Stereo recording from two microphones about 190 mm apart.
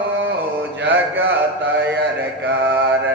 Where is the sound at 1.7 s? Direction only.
70° right (ahead or behind).